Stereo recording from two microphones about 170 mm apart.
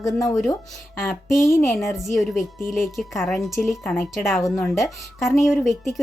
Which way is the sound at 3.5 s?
15° left (ahead or behind).